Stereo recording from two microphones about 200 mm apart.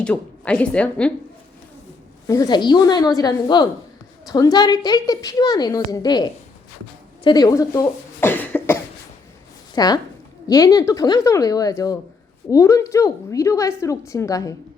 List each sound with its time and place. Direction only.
0.0 s a woman's voice: 5° left (ahead or behind)
2.2 s a woman's voice: 15° left (ahead or behind)
9.7 s a woman's voice: 20° left (ahead or behind)